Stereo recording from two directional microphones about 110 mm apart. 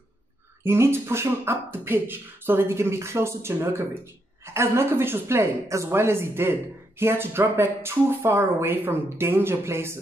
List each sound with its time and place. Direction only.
0.7 s speech: 20° right (ahead or behind)